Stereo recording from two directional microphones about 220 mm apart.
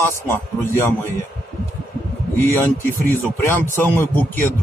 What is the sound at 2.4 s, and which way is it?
Speech, 10° left (ahead or behind).